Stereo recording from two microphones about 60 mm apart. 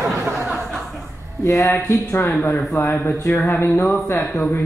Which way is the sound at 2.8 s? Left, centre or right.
Left.